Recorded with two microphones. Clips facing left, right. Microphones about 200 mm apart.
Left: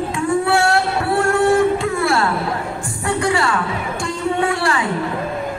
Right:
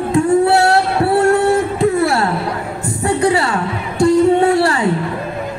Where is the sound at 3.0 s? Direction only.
35° right (ahead or behind).